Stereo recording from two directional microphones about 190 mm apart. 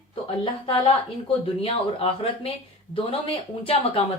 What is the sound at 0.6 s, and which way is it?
A woman's voice, 30° left (ahead or behind).